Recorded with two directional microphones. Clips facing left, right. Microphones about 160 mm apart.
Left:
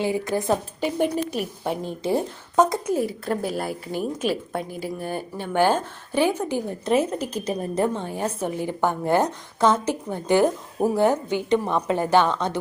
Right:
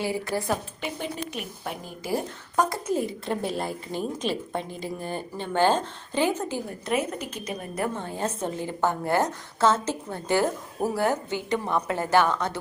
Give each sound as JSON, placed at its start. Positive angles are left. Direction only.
{"t": 0.0, "sound": "a woman's voice", "side_deg": 20}
{"t": 1.3, "sound": "a woman's voice", "side_deg": 35}
{"t": 2.8, "sound": "a woman's voice", "side_deg": 5}
{"t": 6.8, "sound": "a woman's voice", "side_deg": 30}
{"t": 7.9, "sound": "a woman's voice", "side_deg": 15}